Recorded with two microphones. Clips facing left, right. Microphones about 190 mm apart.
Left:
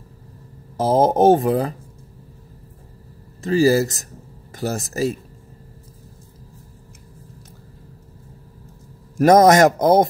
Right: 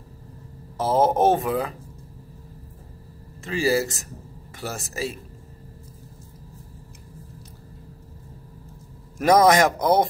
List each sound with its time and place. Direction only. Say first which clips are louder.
0.7 s speech: left 4 dB; 40° left (ahead or behind)
3.4 s speech: left 7 dB; 40° left (ahead or behind)
9.2 s speech: left 5 dB; 45° left (ahead or behind)